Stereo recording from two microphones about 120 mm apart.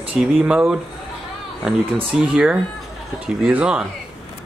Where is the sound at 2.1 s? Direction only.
10° right (ahead or behind).